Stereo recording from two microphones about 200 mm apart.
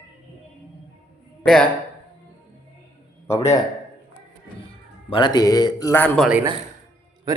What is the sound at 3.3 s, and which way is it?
Speech, 15° left (ahead or behind).